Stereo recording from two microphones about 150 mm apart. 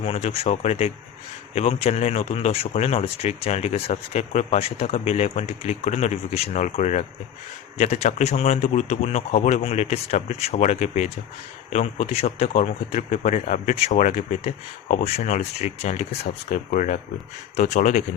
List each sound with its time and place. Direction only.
0.0 s a man's voice: 45° left (ahead or behind)